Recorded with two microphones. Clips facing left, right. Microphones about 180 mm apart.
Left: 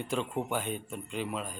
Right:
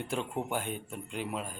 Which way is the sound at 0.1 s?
10° right (ahead or behind).